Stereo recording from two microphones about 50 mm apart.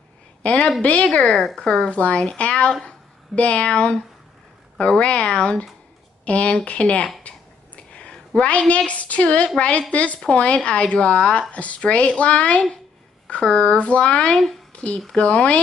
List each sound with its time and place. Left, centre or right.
0.4 s a woman's voice: left
1.3 s speech: centre
1.9 s speech: left
7.2 s a sound: left
8.4 s speech: left
14.2 s speech: centre
14.7 s a sound: left
15.1 s speech: left